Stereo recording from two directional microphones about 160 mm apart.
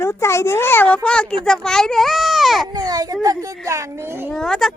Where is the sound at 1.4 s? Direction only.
5° left (ahead or behind).